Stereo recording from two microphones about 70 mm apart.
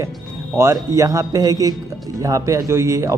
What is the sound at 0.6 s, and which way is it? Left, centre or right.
A man's voice, right.